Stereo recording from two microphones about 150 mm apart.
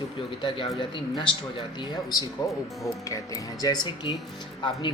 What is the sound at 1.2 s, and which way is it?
Speech, 30° left (ahead or behind).